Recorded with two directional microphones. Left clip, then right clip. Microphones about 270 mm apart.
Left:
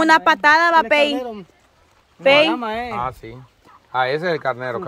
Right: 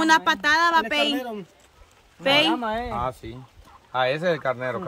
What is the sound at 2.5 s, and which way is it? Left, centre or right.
Speech, left.